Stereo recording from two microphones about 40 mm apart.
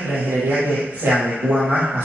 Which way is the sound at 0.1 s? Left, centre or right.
Right.